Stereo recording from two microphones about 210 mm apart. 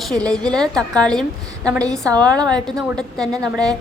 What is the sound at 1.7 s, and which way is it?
A woman's voice, 15° right (ahead or behind).